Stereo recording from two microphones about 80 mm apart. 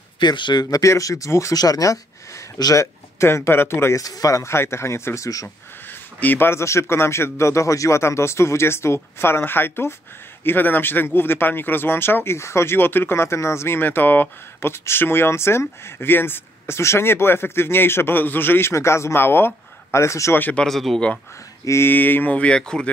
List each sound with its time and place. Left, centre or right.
0.2 s speech: left
0.7 s speech: left
4.0 s a man's voice: left
5.9 s a man's voice: left
20.3 s speech: left
20.6 s speech: centre
21.6 s speech: left; by 22.8 s centre